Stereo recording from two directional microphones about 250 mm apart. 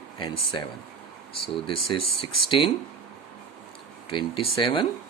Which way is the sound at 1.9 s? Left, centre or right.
Left.